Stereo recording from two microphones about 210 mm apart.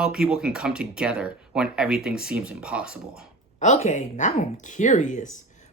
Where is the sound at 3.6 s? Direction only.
35° left (ahead or behind).